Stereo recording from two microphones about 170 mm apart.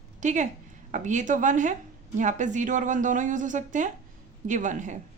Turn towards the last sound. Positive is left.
turn(degrees=-45)  # may be behind; listen again after turning